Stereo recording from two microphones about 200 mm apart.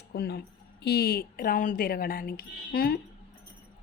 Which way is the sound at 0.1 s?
55° left (ahead or behind).